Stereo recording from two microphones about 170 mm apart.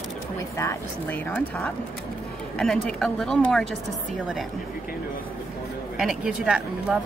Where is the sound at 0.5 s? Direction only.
15° left (ahead or behind).